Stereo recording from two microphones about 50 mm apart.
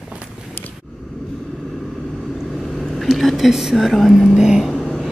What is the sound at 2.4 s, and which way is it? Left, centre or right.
Vehicle, centre.